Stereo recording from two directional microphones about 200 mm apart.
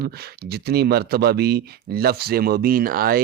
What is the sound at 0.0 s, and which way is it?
A man's voice, 50° right (ahead or behind).